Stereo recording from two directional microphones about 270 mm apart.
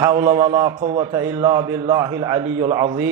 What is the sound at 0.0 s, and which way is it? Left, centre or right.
A man's voice, centre.